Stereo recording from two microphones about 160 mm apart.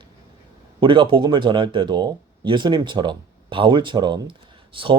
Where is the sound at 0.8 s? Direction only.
30° right (ahead or behind).